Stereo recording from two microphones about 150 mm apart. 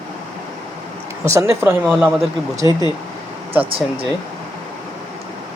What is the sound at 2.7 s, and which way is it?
Speech, 25° left (ahead or behind).